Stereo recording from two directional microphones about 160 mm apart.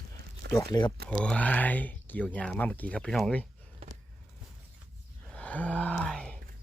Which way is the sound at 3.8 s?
35° right (ahead or behind).